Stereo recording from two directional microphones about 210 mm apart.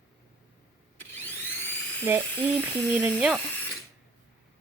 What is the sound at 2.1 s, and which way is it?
A woman's voice, 10° right (ahead or behind).